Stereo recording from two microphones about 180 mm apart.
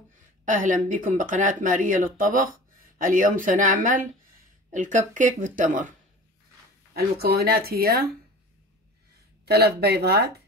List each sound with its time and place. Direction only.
0.5 s speech: 45° right (ahead or behind)
6.9 s speech: 60° right (ahead or behind)
9.5 s speech: 60° right (ahead or behind)